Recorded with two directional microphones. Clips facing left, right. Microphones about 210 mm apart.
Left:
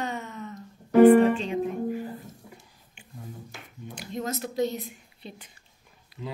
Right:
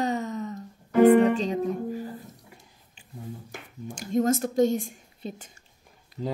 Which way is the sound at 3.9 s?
45° right (ahead or behind).